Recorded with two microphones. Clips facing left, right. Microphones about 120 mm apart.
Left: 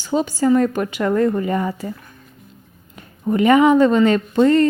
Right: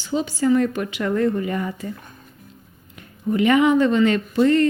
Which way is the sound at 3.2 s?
40° left (ahead or behind).